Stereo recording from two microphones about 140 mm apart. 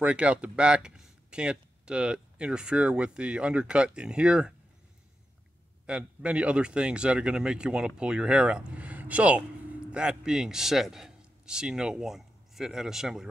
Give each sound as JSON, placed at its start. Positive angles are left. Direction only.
{"t": 0.0, "sound": "speech", "side_deg": -10}
{"t": 5.9, "sound": "a man's voice", "side_deg": -5}